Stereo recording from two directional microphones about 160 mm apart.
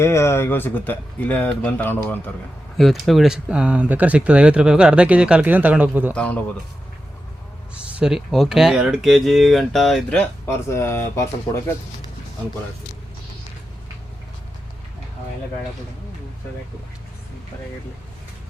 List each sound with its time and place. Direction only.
0.0 s speech: 15° left (ahead or behind)
2.7 s speech: centre (ahead or behind)
6.1 s speech: 10° left (ahead or behind)
7.9 s speech: 5° right (ahead or behind)
10.7 s speech: 15° left (ahead or behind)